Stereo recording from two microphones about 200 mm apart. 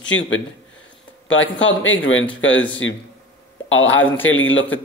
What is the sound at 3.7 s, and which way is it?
Speech, 75° left (ahead or behind).